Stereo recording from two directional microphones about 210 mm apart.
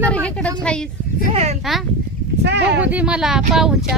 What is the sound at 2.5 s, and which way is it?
Speech, 55° right (ahead or behind).